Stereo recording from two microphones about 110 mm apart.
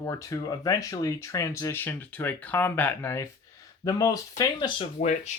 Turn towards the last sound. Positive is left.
turn(degrees=90)